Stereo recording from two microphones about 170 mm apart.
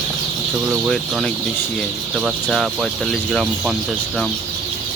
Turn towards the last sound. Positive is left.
turn(degrees=0)  # may be behind; listen again after turning